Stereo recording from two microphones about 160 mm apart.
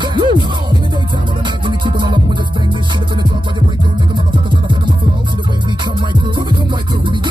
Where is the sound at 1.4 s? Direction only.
30° right (ahead or behind).